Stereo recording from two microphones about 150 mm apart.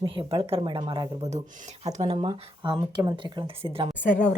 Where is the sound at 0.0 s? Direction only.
35° right (ahead or behind).